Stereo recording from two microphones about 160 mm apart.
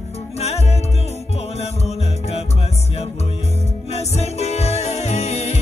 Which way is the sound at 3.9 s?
40° left (ahead or behind).